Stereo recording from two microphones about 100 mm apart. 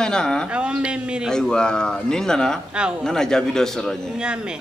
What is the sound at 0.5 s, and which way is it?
Speech, 10° right (ahead or behind).